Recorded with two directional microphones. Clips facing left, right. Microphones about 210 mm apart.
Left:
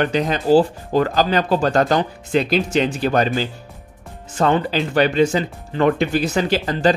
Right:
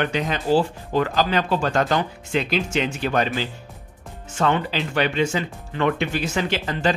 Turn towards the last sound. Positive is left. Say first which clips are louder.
# left 5 dB
turn(degrees=40)  # may be behind; listen again after turning